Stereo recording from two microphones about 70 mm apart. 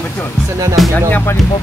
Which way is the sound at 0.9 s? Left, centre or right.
Left.